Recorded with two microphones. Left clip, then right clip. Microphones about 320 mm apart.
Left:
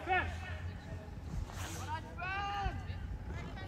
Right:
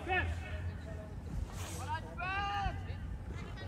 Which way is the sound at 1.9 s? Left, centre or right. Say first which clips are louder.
Right 2 dB; right.